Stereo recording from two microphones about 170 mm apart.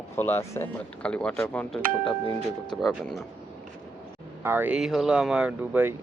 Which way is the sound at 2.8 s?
Centre (ahead or behind).